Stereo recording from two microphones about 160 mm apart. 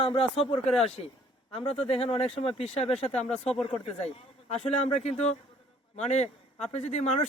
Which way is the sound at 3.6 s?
40° left (ahead or behind).